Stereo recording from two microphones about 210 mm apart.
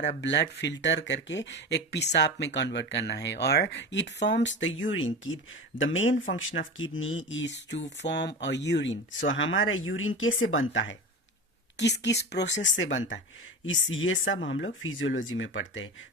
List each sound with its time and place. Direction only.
0.0 s speech: 55° left (ahead or behind)